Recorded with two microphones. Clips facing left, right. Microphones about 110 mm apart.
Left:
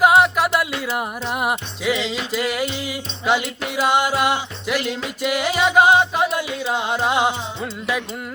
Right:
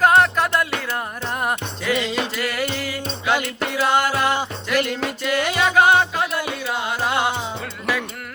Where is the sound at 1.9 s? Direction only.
55° right (ahead or behind).